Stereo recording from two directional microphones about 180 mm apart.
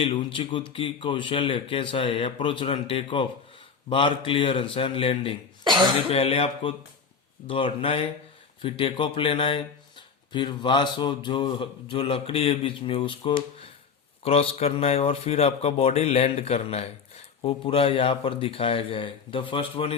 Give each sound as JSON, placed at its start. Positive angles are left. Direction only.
{"t": 0.0, "sound": "speech", "side_deg": 30}